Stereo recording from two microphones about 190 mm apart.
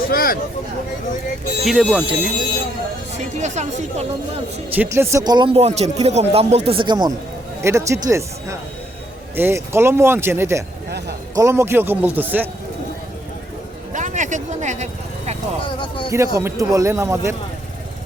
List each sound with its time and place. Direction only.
0.1 s a sound: 50° left (ahead or behind)
1.6 s speech: 5° right (ahead or behind)
3.2 s speech: 40° right (ahead or behind)
4.7 s speech: 10° right (ahead or behind)
5.1 s speech: 20° right (ahead or behind)
5.5 s speech: 35° right (ahead or behind); by 12.5 s 10° right (ahead or behind)
13.9 s a sound: 40° right (ahead or behind)
15.6 s speech: 25° left (ahead or behind)
16.4 s speech: 15° right (ahead or behind)